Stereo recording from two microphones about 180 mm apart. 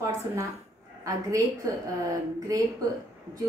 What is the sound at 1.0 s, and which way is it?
A woman's voice, 15° right (ahead or behind).